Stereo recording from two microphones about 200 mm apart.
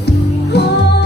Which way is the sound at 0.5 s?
55° left (ahead or behind).